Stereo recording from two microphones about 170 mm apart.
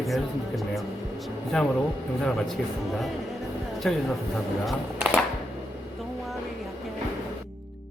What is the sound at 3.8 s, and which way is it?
Speech, 5° left (ahead or behind).